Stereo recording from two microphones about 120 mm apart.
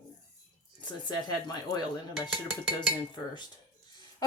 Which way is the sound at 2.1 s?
5° right (ahead or behind).